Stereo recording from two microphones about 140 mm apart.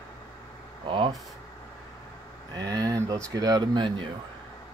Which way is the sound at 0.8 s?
35° right (ahead or behind).